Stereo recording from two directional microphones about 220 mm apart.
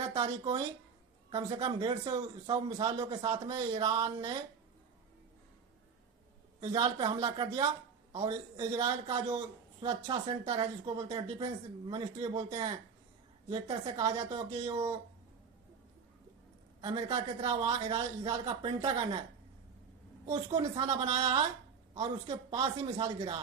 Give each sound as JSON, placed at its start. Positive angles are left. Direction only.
{"t": 0.2, "sound": "speech", "side_deg": -20}
{"t": 6.6, "sound": "a man's voice", "side_deg": -20}
{"t": 8.8, "sound": "speech", "side_deg": -25}
{"t": 14.7, "sound": "a man's voice", "side_deg": -15}
{"t": 16.8, "sound": "speech", "side_deg": -20}
{"t": 20.2, "sound": "a man's voice", "side_deg": -15}
{"t": 20.6, "sound": "speech", "side_deg": -30}